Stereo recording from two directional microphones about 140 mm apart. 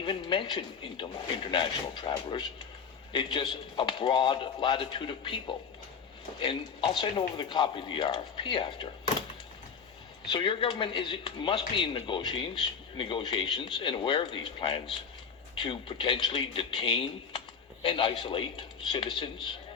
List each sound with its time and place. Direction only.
0.0 s speech: 35° left (ahead or behind)
10.3 s speech: 40° left (ahead or behind)